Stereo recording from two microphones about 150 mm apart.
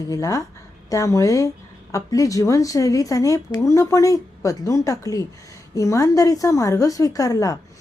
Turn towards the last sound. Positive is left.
turn(degrees=25)  # may be behind; listen again after turning